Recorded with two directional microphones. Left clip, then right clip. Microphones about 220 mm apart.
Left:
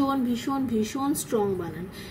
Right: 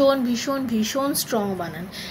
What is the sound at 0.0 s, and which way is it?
A woman's voice, 10° left (ahead or behind).